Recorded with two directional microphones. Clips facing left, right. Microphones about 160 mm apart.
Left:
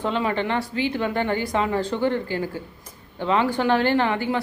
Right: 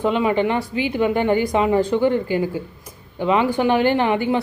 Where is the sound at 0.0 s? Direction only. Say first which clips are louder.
Right 5 dB; 15° right (ahead or behind).